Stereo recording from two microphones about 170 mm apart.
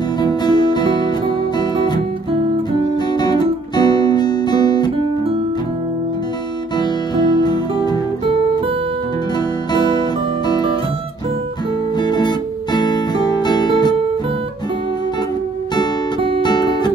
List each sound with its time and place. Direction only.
0.2 s music: 25° left (ahead or behind)
3.2 s guitar: 25° left (ahead or behind)
6.8 s music: 25° left (ahead or behind)
9.7 s music: 25° left (ahead or behind)
12.0 s music: 25° left (ahead or behind)
16.4 s guitar: 25° left (ahead or behind)